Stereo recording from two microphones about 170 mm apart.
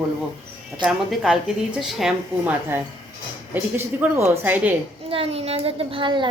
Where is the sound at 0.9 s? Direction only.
5° right (ahead or behind).